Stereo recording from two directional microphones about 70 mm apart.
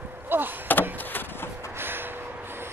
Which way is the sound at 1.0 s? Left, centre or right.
Left.